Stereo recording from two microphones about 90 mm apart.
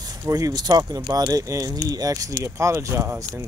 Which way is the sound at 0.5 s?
50° right (ahead or behind).